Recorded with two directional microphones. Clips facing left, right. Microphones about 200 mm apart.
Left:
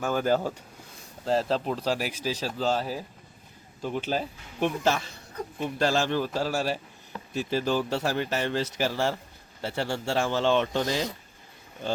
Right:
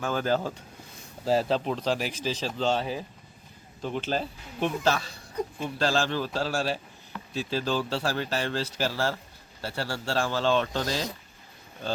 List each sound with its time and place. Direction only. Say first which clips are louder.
0.0 s speech: left 2 dB; 10° left (ahead or behind)
1.2 s speech: right 1 dB; 5° right (ahead or behind); by 11.0 s 20° left (ahead or behind)